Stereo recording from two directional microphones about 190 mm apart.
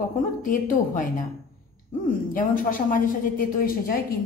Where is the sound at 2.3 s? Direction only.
45° left (ahead or behind).